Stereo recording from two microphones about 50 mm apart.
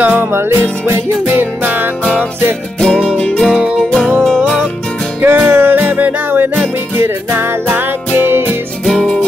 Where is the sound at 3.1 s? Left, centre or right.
Left.